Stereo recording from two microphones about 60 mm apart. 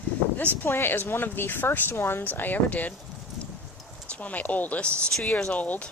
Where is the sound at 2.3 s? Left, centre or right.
Left.